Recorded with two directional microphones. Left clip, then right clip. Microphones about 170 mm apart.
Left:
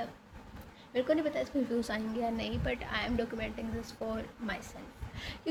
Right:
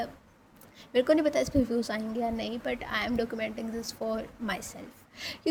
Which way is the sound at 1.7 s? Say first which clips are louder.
Right 3 dB; 25° right (ahead or behind).